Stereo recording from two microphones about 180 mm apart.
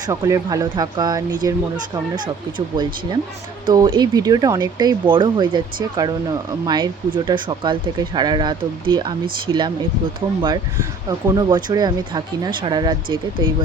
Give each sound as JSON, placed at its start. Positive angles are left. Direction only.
{"t": 0.0, "sound": "speech", "side_deg": -20}